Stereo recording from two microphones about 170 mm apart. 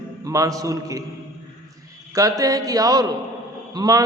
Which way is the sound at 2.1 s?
20° right (ahead or behind).